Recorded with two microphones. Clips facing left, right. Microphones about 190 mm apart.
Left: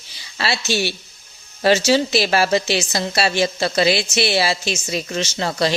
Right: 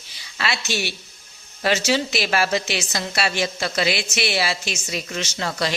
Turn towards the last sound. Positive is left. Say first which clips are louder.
# left 5 dB
turn(degrees=30)  # may be behind; listen again after turning